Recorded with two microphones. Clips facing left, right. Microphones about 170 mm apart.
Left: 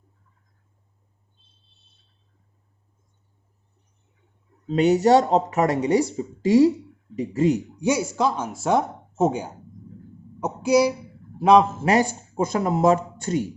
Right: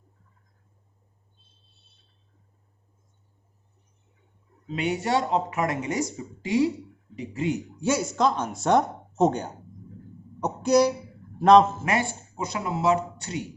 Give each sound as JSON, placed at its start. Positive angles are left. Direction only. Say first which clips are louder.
{"t": 4.7, "sound": "speech", "louder": "left 9 dB", "side_deg": 40}
{"t": 6.4, "sound": "speech", "louder": "left 7 dB", "side_deg": 45}
{"t": 7.8, "sound": "speech", "louder": "left 2 dB", "side_deg": 15}
{"t": 10.4, "sound": "a sound", "louder": "left 1 dB", "side_deg": 10}
{"t": 11.3, "sound": "a man's voice", "louder": "even", "side_deg": 10}
{"t": 11.8, "sound": "speech", "louder": "left 6 dB", "side_deg": 40}